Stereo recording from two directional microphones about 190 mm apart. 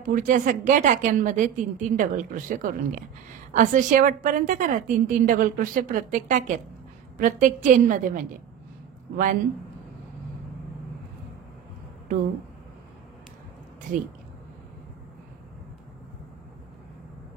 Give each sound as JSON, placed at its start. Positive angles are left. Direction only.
{"t": 0.0, "sound": "a woman's voice", "side_deg": -45}